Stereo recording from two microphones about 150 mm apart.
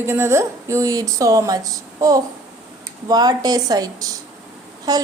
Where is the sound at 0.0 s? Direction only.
15° right (ahead or behind).